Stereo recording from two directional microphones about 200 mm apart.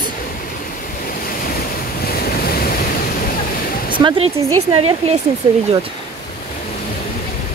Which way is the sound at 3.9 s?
25° right (ahead or behind).